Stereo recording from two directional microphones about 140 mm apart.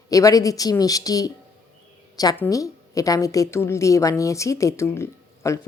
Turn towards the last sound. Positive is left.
turn(degrees=20)  # may be behind; listen again after turning